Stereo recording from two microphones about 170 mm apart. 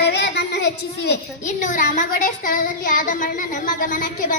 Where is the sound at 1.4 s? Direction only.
50° left (ahead or behind).